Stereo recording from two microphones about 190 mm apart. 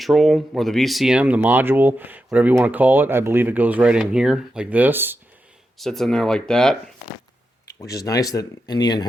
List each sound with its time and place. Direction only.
0.0 s speech: centre (ahead or behind)
5.8 s speech: centre (ahead or behind)
7.8 s speech: 20° left (ahead or behind)